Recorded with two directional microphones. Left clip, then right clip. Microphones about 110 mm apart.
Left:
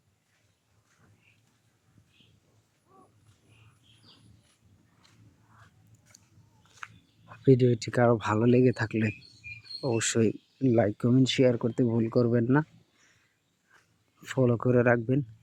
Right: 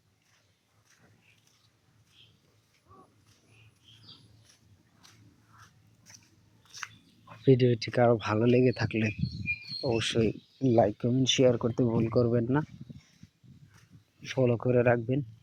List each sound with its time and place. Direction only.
7.4 s speech: 30° left (ahead or behind)
14.2 s speech: 45° left (ahead or behind)